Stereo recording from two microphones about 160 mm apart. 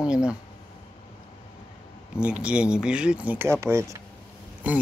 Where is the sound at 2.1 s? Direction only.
5° right (ahead or behind).